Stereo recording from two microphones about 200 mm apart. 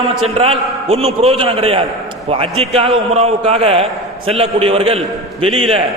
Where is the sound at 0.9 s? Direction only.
30° right (ahead or behind).